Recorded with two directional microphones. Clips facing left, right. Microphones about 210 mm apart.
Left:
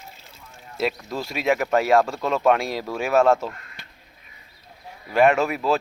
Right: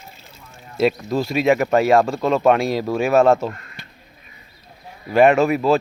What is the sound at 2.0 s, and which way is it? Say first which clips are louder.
Speech: right 4 dB; 25° right (ahead or behind).